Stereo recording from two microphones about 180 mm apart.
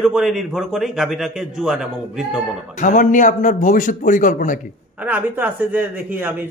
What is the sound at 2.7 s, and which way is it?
A man's voice, 45° left (ahead or behind).